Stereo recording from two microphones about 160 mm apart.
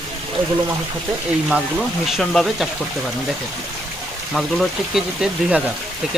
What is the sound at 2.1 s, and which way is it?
Speech, centre (ahead or behind).